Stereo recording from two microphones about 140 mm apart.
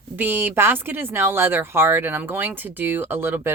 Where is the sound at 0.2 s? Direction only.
15° right (ahead or behind).